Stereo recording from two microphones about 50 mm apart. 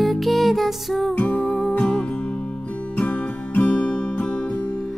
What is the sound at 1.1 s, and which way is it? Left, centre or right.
Music, left.